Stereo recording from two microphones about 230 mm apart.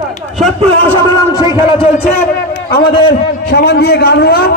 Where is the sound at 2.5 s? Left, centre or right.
Left.